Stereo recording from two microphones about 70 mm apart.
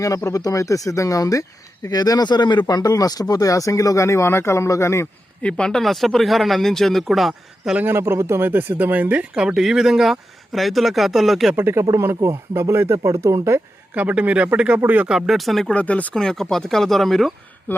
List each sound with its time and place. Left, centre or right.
0.3 s speech: left
5.4 s speech: centre
7.8 s speech: right; by 11.5 s centre
11.5 s speech: right
13.0 s speech: right
13.9 s speech: right
15.0 s speech: centre
15.7 s speech: centre
16.1 s speech: centre
17.7 s speech: left